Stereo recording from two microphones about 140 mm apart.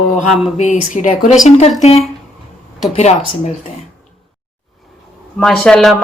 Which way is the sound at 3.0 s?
55° left (ahead or behind).